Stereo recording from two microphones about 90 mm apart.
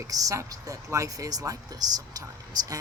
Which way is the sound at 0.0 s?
40° right (ahead or behind).